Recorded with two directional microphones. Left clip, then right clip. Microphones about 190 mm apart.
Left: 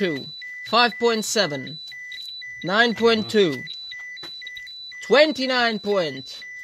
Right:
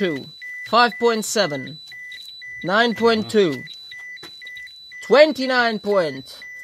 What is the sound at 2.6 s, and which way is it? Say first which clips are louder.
Speech: right 1 dB; 30° left (ahead or behind).